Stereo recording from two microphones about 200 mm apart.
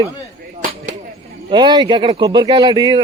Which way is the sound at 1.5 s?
25° right (ahead or behind).